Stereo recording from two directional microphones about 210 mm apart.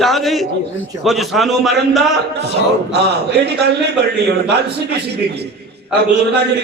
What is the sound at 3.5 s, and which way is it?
Speech, 50° right (ahead or behind).